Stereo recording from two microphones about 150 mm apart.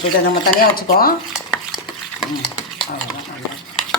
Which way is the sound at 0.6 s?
80° left.